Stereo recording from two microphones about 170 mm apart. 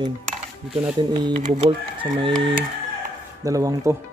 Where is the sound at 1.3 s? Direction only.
45° right (ahead or behind).